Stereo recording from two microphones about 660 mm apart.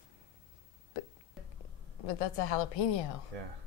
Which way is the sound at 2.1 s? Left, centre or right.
Left.